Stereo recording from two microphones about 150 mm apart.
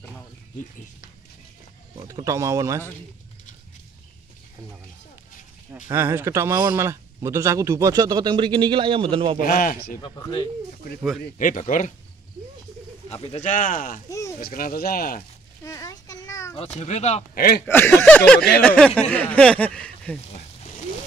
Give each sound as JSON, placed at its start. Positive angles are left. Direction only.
{"t": 2.0, "sound": "speech", "side_deg": -20}
{"t": 5.9, "sound": "speech", "side_deg": -15}
{"t": 9.5, "sound": "speech", "side_deg": 65}
{"t": 11.3, "sound": "speech", "side_deg": 55}
{"t": 13.2, "sound": "speech", "side_deg": 45}
{"t": 15.6, "sound": "a sound", "side_deg": 20}
{"t": 16.5, "sound": "speech", "side_deg": 50}
{"t": 17.4, "sound": "speech", "side_deg": 90}
{"t": 17.6, "sound": "speech", "side_deg": 15}
{"t": 20.3, "sound": "a sound", "side_deg": 45}